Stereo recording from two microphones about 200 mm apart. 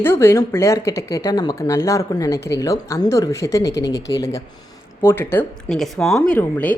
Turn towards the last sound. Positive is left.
turn(degrees=10)  # may be behind; listen again after turning